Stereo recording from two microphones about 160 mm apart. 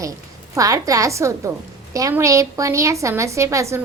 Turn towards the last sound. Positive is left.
turn(degrees=-20)  # may be behind; listen again after turning